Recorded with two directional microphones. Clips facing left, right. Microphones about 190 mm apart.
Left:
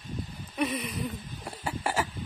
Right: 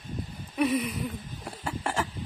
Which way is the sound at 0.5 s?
5° right (ahead or behind).